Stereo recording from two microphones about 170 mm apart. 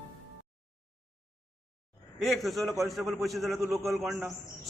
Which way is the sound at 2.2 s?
Centre (ahead or behind).